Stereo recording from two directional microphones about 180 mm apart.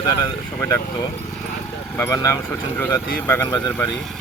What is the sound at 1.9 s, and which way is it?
Speech, 15° left (ahead or behind).